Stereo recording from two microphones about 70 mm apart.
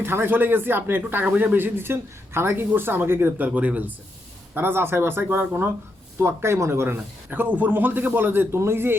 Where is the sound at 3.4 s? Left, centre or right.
Right.